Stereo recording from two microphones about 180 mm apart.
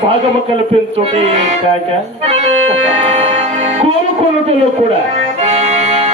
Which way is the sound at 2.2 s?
35° right (ahead or behind).